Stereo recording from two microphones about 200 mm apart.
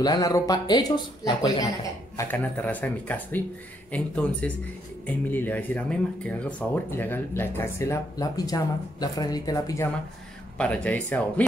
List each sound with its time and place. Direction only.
0.0 s speech: 20° left (ahead or behind)
10.6 s speech: 5° left (ahead or behind)